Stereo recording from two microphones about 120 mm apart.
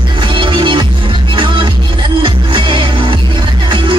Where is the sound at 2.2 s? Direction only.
45° right (ahead or behind).